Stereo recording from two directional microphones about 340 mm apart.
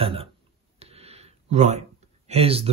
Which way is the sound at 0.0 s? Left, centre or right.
Centre.